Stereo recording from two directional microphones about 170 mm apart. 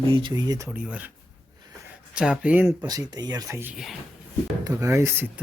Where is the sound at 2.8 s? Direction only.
25° right (ahead or behind).